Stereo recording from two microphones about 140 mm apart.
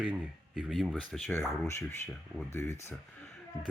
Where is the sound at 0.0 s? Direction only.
5° right (ahead or behind).